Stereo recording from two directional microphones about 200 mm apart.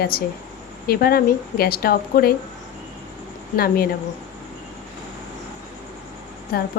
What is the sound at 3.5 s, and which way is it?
Speech, 50° left (ahead or behind).